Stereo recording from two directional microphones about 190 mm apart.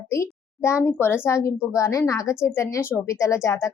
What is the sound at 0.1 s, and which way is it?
A woman's voice, 15° left (ahead or behind).